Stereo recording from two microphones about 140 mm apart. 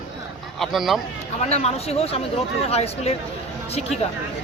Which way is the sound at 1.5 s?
50° left (ahead or behind).